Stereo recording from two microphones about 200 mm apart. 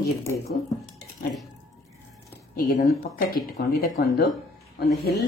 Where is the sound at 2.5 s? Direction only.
45° left (ahead or behind).